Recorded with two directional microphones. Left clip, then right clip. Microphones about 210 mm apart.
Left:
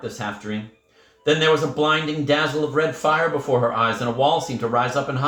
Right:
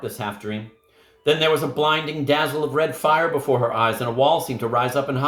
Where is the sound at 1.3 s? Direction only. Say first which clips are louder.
Left 1 dB; 55° right (ahead or behind).